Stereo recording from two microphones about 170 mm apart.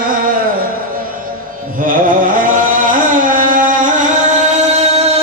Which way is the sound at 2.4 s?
50° right (ahead or behind).